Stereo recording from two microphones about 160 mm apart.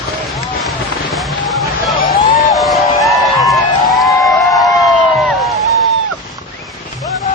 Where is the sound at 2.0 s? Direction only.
65° left (ahead or behind).